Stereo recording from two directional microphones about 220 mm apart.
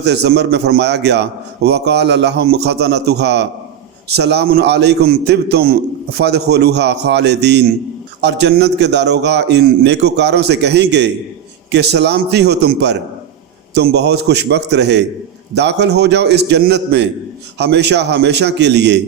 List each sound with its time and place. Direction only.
0.0 s a man's voice: 50° right (ahead or behind)